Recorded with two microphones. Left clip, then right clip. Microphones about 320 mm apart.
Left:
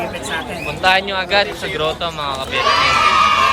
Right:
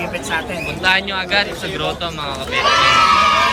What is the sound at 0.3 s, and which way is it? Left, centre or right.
Speech, centre.